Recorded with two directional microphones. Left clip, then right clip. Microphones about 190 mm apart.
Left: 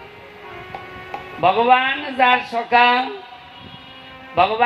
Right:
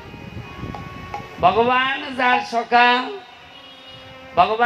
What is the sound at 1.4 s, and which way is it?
Speech, 30° right (ahead or behind).